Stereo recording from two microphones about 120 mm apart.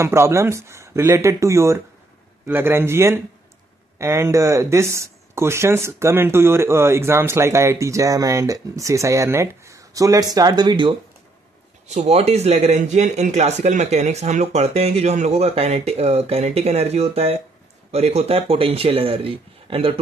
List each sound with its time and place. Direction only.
0.0 s speech: 20° right (ahead or behind); by 11.0 s 40° right (ahead or behind)
11.9 s speech: 65° right (ahead or behind); by 19.9 s 50° right (ahead or behind)